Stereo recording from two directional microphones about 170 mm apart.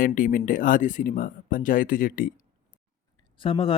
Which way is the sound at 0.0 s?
55° left (ahead or behind).